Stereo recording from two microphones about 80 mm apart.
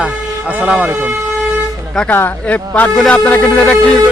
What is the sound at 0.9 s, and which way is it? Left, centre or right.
Speech, right.